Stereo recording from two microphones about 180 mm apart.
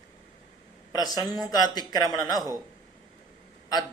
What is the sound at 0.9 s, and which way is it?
A man's voice, 20° left (ahead or behind).